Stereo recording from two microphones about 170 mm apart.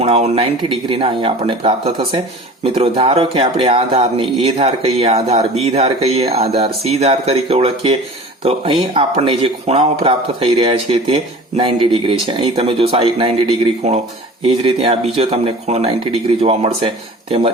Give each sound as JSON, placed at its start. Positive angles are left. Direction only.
{"t": 0.0, "sound": "speech", "side_deg": -35}